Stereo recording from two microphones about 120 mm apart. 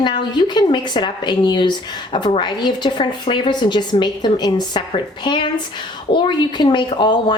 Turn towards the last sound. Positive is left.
turn(degrees=40)  # may be behind; listen again after turning